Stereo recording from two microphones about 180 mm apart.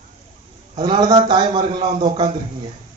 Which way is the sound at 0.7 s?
30° right (ahead or behind).